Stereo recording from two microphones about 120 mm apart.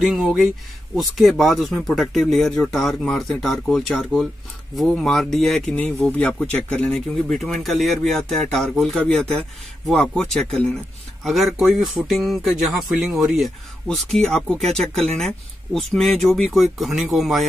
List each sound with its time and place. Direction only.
0.0 s speech: 5° right (ahead or behind)